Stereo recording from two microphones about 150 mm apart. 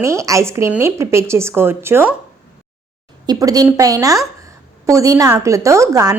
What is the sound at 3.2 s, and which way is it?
A woman's voice, 25° right (ahead or behind).